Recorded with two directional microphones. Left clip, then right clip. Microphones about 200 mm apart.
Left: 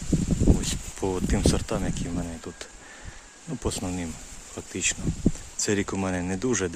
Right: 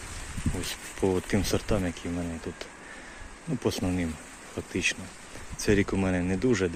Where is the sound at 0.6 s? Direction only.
15° left (ahead or behind).